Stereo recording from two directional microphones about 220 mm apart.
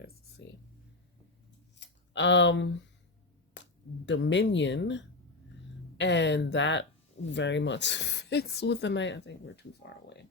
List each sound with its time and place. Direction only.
1.8 s speech: 55° left (ahead or behind)
3.6 s a sound: 55° left (ahead or behind)
4.0 s speech: 55° left (ahead or behind)